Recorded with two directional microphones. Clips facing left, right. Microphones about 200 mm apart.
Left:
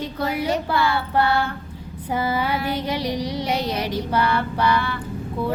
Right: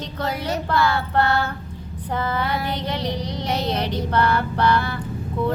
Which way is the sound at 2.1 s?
10° left (ahead or behind).